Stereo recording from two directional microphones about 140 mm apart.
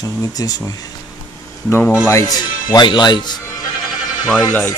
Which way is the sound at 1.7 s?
15° left (ahead or behind).